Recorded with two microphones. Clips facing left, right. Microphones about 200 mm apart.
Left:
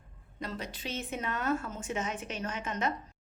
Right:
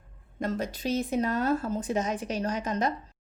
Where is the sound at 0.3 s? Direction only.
45° right (ahead or behind).